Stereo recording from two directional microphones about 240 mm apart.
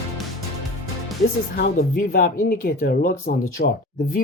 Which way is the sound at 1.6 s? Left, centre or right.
Left.